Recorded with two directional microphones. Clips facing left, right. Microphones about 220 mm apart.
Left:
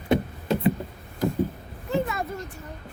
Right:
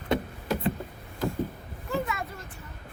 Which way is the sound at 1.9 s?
25° left (ahead or behind).